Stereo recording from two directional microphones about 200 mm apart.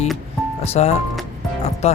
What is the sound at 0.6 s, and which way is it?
Speech, 30° left (ahead or behind).